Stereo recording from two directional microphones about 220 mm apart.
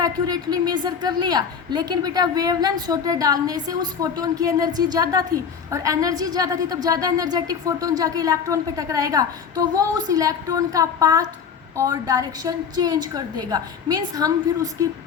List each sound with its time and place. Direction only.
0.0 s a woman's voice: 20° right (ahead or behind)